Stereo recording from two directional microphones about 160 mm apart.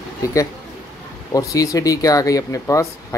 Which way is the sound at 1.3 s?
20° left (ahead or behind).